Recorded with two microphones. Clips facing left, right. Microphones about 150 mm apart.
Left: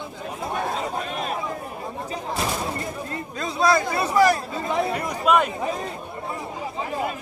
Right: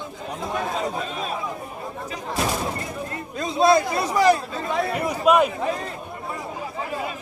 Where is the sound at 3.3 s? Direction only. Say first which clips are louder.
Right 3 dB; 20° right (ahead or behind).